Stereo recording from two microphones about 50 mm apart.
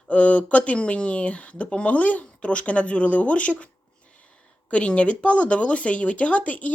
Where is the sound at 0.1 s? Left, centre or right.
Left.